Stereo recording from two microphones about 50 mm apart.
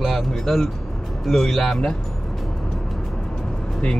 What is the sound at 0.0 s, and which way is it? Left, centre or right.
Speech, centre.